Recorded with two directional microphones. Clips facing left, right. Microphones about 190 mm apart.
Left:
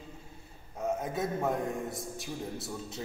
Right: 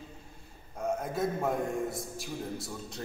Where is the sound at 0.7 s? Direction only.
Centre (ahead or behind).